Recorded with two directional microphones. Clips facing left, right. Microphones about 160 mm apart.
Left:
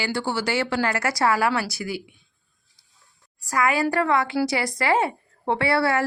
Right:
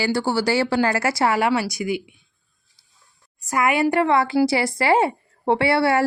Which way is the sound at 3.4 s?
20° right (ahead or behind).